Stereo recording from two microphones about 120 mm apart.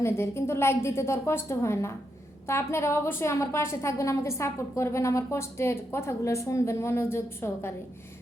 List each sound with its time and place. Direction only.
0.0 s a woman's voice: 20° left (ahead or behind)